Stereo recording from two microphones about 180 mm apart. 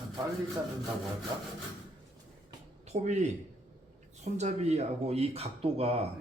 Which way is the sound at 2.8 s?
40° right (ahead or behind).